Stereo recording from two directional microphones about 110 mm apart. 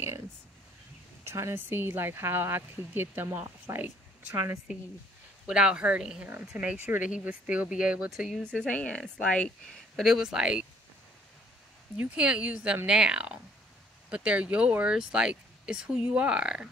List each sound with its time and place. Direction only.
1.2 s speech: 25° right (ahead or behind)
5.5 s speech: 10° right (ahead or behind)
8.5 s speech: 10° left (ahead or behind); by 10.7 s 10° right (ahead or behind)
12.0 s speech: 10° right (ahead or behind)